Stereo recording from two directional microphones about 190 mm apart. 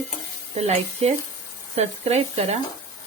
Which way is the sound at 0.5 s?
35° right (ahead or behind).